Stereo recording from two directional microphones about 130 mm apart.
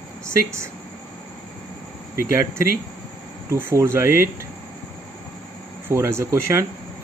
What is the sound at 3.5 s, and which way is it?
Speech, 20° right (ahead or behind).